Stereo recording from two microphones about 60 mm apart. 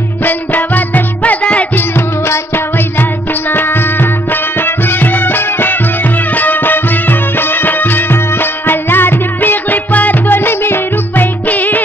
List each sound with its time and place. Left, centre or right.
0.2 s music: left
1.8 s music: left
11.4 s music: left